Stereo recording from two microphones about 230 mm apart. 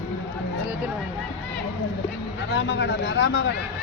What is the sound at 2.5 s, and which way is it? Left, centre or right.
Speech, left.